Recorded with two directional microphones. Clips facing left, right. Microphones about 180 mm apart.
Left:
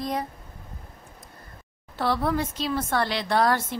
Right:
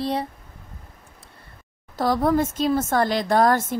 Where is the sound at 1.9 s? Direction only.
45° right (ahead or behind).